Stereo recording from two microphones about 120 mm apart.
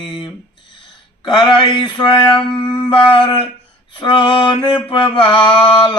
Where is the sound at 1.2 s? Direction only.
40° left (ahead or behind).